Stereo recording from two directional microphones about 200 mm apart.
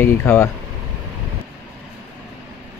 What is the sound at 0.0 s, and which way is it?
Speech, 10° left (ahead or behind).